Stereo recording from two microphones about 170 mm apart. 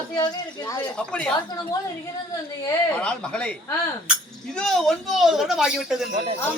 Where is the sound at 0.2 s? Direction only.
25° left (ahead or behind).